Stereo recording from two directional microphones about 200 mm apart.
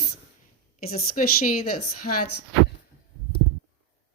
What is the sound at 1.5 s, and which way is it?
Speech, 90° left.